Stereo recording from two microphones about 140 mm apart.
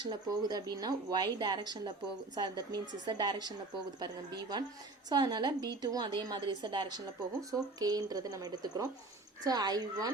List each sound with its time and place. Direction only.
0.0 s a woman's voice: 30° right (ahead or behind)